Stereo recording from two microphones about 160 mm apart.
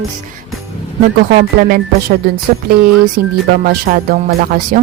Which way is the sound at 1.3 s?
65° right (ahead or behind).